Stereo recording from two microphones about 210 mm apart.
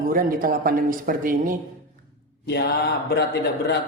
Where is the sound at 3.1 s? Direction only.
50° left (ahead or behind).